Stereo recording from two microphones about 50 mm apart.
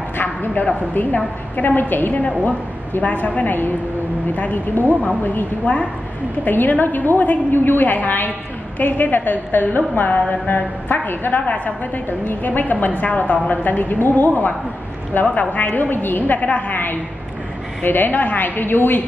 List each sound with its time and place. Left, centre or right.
0.2 s a woman's voice: left
11.4 s a woman's voice: left